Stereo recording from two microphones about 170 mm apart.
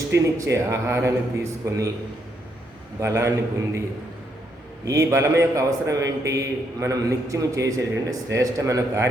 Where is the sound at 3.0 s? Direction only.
15° right (ahead or behind).